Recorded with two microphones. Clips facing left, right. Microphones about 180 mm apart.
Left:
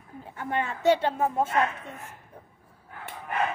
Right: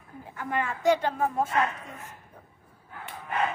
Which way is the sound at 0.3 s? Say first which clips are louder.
Left 1 dB; 25° left (ahead or behind).